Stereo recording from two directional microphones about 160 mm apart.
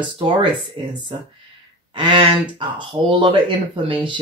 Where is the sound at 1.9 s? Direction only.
30° right (ahead or behind).